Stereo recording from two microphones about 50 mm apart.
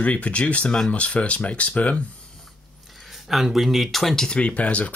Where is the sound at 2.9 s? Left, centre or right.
Centre.